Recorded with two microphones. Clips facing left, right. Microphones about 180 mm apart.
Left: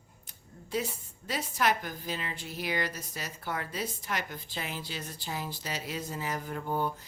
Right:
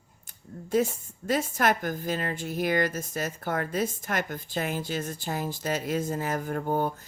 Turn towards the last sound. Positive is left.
turn(degrees=-50)  # may be behind; listen again after turning